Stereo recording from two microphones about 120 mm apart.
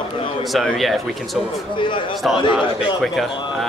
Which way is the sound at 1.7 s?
45° left (ahead or behind).